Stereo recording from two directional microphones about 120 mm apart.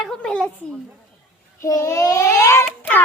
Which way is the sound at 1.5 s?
25° left (ahead or behind).